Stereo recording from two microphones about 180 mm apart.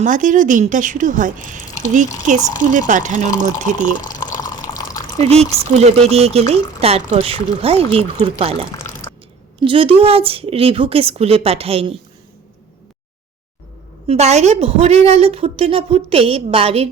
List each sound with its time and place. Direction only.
0.0 s speech: 45° right (ahead or behind)
4.4 s water: 20° left (ahead or behind)
5.2 s speech: 35° right (ahead or behind)
14.1 s speech: 35° right (ahead or behind)